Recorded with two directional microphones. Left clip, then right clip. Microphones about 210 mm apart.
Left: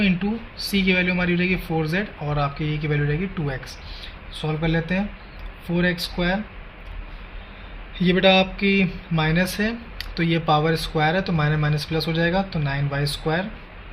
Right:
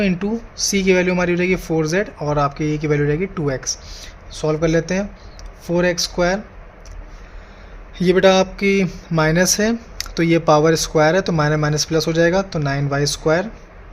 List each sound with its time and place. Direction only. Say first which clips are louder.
0.0 s speech: right 3 dB; 60° right (ahead or behind)
7.9 s speech: right 4 dB; 60° right (ahead or behind)